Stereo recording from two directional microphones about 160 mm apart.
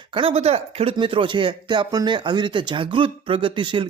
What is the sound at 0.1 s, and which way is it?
Speech, 35° right (ahead or behind).